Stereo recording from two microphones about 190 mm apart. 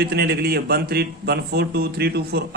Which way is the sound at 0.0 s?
60° right (ahead or behind).